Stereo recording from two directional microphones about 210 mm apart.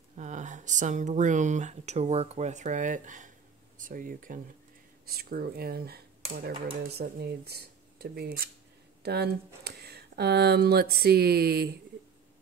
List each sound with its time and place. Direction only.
0.2 s speech: 35° right (ahead or behind)